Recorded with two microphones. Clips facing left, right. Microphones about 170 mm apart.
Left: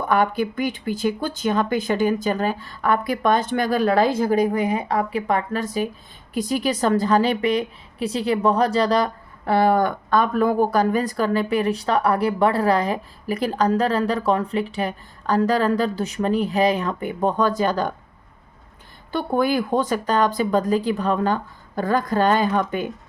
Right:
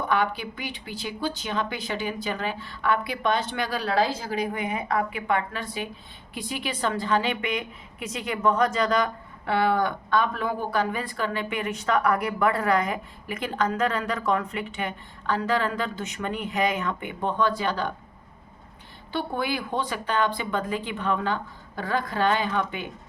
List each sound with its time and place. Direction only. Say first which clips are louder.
0.1 s speech: left 8 dB; 45° left (ahead or behind)
19.1 s speech: left 7 dB; 45° left (ahead or behind)